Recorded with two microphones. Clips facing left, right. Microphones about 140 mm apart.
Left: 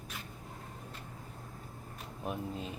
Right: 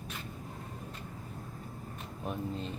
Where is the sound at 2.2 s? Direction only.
5° left (ahead or behind).